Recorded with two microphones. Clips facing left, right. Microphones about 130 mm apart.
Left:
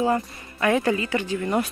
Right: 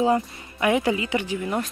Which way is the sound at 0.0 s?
20° right (ahead or behind).